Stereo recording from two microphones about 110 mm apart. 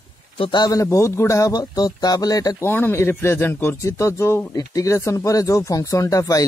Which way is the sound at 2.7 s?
20° left (ahead or behind).